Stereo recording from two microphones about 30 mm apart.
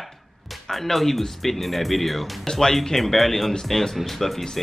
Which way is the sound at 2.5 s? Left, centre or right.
Centre.